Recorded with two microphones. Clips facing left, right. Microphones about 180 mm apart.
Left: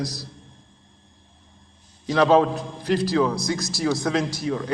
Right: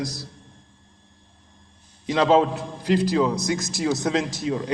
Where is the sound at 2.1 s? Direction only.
20° right (ahead or behind).